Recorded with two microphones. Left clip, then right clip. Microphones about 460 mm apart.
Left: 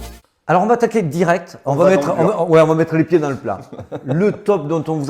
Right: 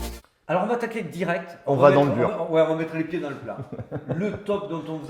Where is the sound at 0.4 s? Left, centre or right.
Left.